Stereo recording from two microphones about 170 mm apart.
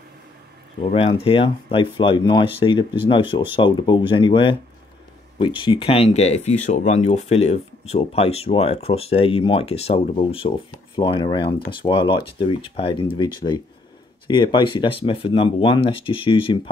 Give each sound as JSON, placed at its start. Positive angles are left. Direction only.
{"t": 0.7, "sound": "speech", "side_deg": 40}